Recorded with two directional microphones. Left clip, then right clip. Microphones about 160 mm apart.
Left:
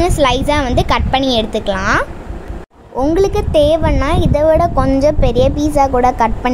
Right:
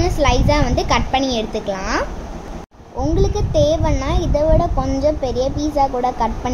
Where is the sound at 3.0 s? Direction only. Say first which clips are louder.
Left 6 dB; 55° left (ahead or behind).